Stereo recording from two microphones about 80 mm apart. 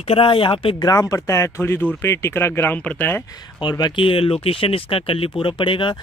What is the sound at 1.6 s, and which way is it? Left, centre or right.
Speech, left.